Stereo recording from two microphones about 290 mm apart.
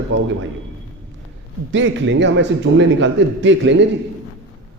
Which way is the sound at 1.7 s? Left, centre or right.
Right.